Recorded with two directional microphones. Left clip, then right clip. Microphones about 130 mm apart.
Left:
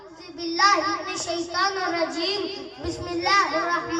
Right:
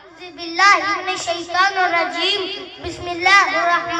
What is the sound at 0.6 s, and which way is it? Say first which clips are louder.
A child's voice: right 6 dB; 40° left (ahead or behind).